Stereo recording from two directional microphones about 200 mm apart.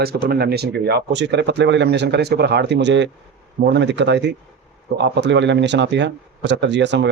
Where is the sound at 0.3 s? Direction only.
50° right (ahead or behind).